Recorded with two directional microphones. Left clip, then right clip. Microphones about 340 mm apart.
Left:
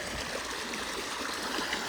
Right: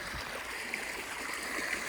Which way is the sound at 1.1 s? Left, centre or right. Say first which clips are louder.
Left 3 dB; centre.